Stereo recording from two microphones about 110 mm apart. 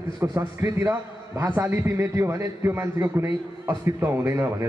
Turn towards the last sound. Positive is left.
turn(degrees=-30)  # may be behind; listen again after turning